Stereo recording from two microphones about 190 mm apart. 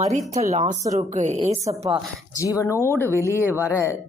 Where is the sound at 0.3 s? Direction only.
35° right (ahead or behind).